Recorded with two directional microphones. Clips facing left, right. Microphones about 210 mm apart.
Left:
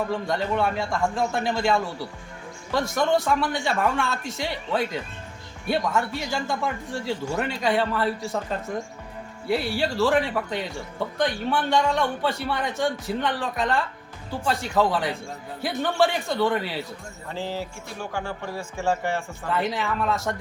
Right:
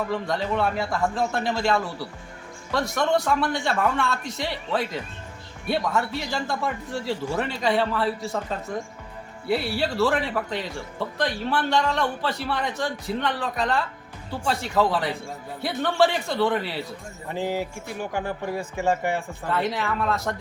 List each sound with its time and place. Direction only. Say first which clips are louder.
0.1 s speech: even; centre (ahead or behind)
17.2 s a man's voice: right 4 dB; 15° right (ahead or behind)
19.5 s speech: even; centre (ahead or behind)